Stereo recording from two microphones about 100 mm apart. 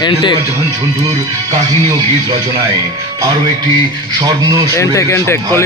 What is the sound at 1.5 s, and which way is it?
Speech, 45° right (ahead or behind).